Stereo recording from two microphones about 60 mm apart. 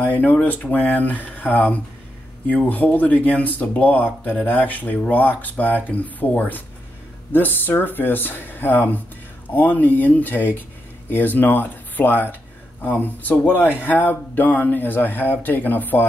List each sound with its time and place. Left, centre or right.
0.0 s speech: left